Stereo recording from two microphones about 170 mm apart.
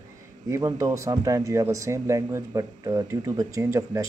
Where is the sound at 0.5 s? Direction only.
20° right (ahead or behind).